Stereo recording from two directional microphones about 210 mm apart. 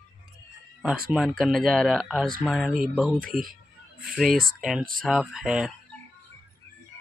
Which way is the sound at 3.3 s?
45° right (ahead or behind).